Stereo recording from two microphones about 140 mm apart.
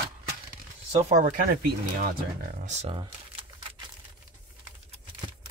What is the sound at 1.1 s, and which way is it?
Speech, 75° right (ahead or behind).